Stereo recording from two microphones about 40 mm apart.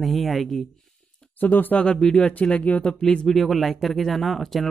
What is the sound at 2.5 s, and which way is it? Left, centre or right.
Speech, left.